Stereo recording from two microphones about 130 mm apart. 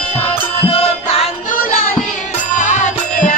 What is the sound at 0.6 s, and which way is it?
Music, 50° left (ahead or behind).